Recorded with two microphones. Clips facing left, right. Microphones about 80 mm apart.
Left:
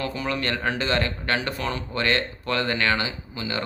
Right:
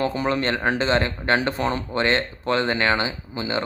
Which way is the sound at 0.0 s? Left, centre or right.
Right.